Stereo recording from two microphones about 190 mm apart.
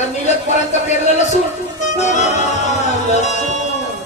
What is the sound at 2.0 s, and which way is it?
Music, 35° left (ahead or behind).